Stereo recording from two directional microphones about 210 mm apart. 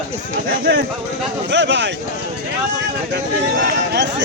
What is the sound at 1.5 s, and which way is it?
Speech, 55° right (ahead or behind).